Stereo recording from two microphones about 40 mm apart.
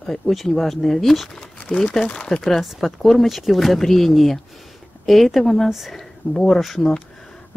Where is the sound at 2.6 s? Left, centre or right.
Centre.